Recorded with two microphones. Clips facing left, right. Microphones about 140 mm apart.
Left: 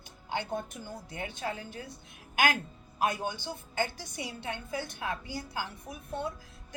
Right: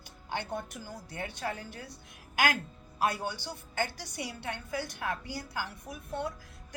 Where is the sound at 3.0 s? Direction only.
20° left (ahead or behind).